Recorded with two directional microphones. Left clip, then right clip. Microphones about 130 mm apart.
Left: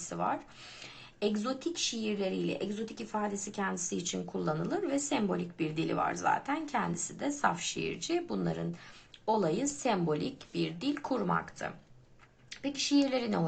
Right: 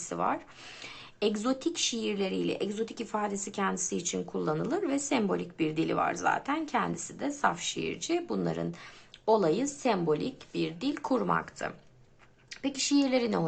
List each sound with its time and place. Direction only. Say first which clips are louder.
0.0 s speech: right 3 dB; 30° right (ahead or behind)